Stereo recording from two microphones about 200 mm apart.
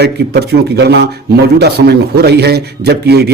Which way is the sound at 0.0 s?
55° right (ahead or behind).